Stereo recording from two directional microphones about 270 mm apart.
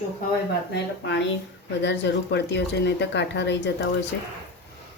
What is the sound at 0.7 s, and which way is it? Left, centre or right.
Speech, left.